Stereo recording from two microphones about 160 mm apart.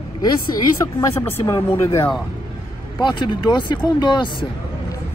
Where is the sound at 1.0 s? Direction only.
20° left (ahead or behind).